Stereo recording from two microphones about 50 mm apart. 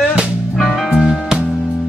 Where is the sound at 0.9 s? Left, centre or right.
Centre.